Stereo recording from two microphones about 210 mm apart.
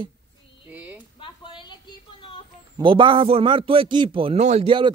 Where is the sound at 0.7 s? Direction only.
5° right (ahead or behind).